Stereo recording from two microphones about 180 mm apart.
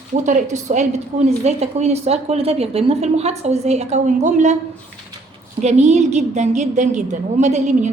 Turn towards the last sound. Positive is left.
turn(degrees=-40)  # may be behind; listen again after turning